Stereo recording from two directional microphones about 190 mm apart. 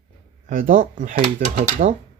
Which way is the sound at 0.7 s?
40° right (ahead or behind).